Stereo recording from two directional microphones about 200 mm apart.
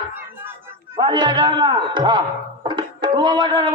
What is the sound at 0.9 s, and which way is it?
A man's voice, 20° right (ahead or behind).